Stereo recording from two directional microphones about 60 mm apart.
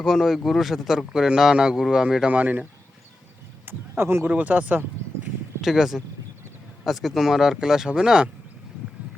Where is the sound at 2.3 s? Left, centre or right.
Right.